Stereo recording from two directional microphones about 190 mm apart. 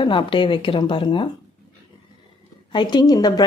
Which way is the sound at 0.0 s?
25° left (ahead or behind).